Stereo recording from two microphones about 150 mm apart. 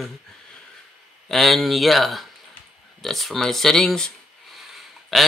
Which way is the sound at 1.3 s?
Centre (ahead or behind).